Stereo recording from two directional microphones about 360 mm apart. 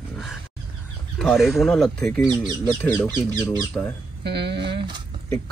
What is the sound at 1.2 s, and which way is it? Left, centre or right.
Speech, centre.